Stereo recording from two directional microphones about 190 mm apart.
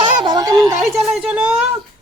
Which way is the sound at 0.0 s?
20° right (ahead or behind).